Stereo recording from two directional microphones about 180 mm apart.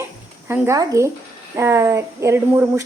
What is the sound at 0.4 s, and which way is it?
A woman's voice, 10° right (ahead or behind).